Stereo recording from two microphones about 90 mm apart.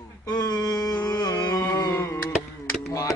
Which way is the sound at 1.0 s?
25° left (ahead or behind).